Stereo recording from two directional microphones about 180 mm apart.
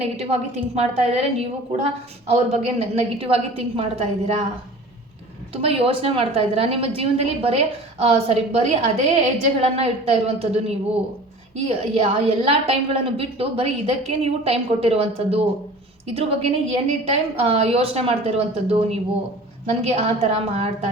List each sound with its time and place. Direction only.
0.0 s a woman's voice: 35° right (ahead or behind)
5.6 s a woman's voice: 30° right (ahead or behind)